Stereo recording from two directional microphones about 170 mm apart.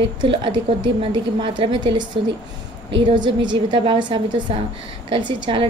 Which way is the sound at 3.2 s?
25° right (ahead or behind).